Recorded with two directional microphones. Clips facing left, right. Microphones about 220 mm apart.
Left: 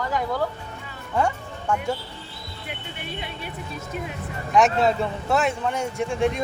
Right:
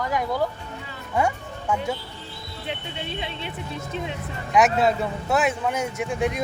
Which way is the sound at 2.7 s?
25° right (ahead or behind).